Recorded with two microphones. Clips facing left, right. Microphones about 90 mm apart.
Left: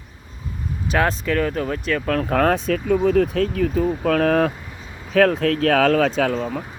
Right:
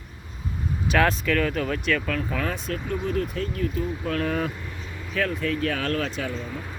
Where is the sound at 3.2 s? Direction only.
90° left.